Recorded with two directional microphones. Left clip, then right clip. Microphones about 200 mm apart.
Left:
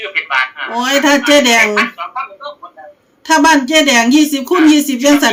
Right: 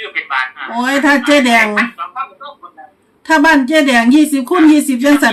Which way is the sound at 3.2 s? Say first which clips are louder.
Even; 5° right (ahead or behind).